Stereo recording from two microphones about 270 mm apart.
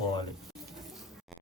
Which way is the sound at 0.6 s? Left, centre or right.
Centre.